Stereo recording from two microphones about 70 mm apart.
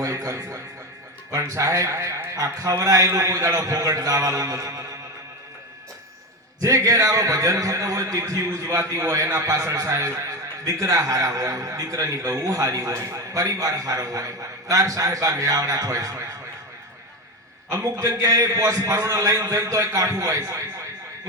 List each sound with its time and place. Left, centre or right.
0.0 s a man's voice: right
6.6 s a man's voice: right
17.7 s a man's voice: right